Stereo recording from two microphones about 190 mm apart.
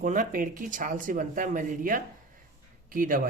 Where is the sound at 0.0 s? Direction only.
45° right (ahead or behind).